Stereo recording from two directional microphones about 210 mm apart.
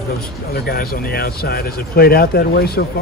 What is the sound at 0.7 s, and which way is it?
Speech, 45° left (ahead or behind).